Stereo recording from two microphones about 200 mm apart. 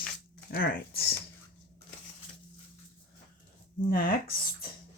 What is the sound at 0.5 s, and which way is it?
Speech, 50° left (ahead or behind).